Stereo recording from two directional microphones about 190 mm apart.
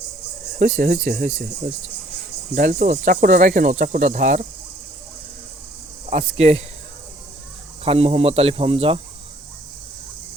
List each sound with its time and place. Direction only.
0.6 s speech: 45° right (ahead or behind)
2.6 s speech: 45° right (ahead or behind)
6.1 s speech: 35° right (ahead or behind)
7.9 s speech: 30° right (ahead or behind)